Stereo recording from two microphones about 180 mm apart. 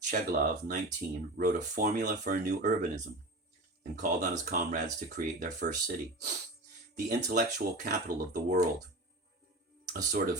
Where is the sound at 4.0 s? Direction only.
50° right (ahead or behind).